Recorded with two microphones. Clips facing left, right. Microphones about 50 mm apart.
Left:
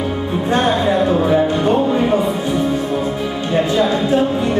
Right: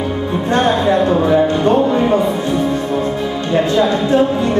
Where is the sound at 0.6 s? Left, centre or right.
Centre.